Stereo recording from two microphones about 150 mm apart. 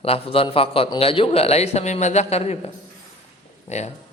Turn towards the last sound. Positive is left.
turn(degrees=50)  # may be behind; listen again after turning